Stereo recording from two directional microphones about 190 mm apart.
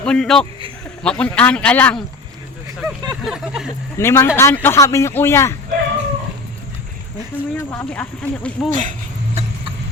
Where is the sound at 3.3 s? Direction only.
5° right (ahead or behind).